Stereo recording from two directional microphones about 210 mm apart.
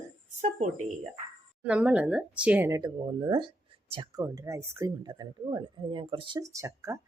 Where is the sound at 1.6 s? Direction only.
5° right (ahead or behind).